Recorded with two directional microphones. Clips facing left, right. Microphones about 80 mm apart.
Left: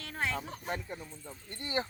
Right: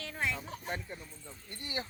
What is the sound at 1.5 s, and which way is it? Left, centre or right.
Speech, left.